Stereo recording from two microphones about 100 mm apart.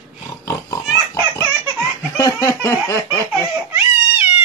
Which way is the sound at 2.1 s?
35° left (ahead or behind).